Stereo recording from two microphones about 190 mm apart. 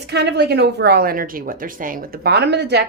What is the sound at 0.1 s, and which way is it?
A woman's voice, 60° right (ahead or behind).